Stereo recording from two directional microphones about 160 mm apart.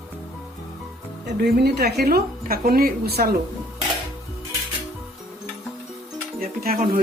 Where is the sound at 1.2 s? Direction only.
90° right.